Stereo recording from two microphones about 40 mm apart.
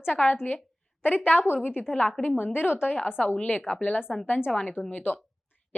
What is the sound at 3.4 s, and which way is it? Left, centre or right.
Speech, left.